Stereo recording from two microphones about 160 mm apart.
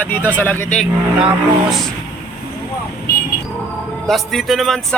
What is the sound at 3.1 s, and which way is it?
Vehicle, 80° left.